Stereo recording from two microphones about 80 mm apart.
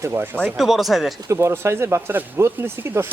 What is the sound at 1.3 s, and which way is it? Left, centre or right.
Speech, right.